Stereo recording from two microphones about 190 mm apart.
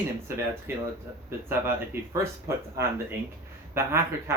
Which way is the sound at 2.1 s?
15° right (ahead or behind).